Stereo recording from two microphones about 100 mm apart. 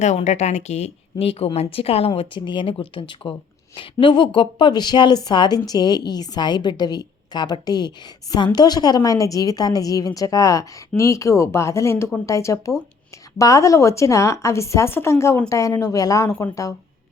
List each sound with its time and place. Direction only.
0.2 s speech: 90° left
1.2 s a woman's voice: 75° left (ahead or behind); by 16.7 s 35° left (ahead or behind)